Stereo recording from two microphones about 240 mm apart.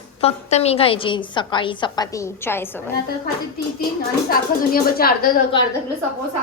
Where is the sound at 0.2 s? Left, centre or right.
Left; by 2.9 s centre.